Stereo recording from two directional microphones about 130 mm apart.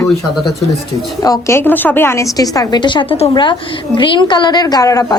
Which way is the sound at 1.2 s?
25° left (ahead or behind).